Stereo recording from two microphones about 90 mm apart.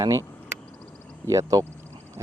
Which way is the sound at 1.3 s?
35° right (ahead or behind).